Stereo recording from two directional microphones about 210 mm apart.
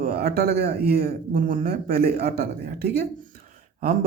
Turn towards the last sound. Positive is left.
turn(degrees=-40)  # may be behind; listen again after turning